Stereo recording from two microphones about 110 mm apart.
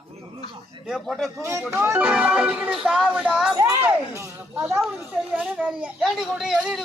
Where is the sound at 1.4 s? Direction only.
25° right (ahead or behind); by 3.5 s 5° right (ahead or behind).